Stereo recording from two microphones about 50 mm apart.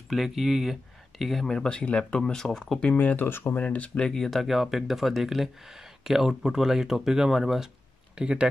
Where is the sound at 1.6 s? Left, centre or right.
Left.